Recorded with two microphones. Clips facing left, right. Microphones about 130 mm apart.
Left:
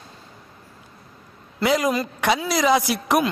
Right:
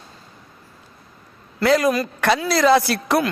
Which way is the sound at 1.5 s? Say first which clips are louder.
Right 3 dB; 15° left (ahead or behind).